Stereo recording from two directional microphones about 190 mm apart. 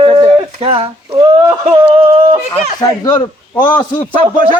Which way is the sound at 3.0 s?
20° left (ahead or behind).